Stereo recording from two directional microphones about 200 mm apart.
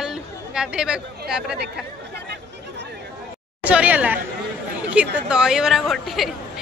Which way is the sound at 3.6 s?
5° right (ahead or behind).